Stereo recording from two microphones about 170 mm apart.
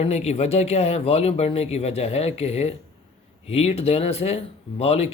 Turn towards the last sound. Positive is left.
turn(degrees=35)  # may be behind; listen again after turning